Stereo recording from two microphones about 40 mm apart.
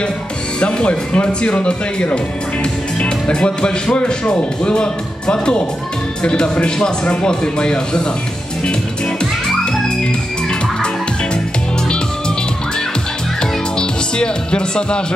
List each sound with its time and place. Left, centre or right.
0.6 s speech: left
13.4 s music: left